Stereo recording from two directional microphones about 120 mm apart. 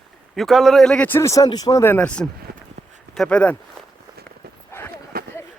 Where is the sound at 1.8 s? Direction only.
15° left (ahead or behind).